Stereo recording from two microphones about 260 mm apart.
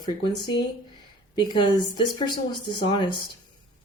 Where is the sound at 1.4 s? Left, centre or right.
Centre.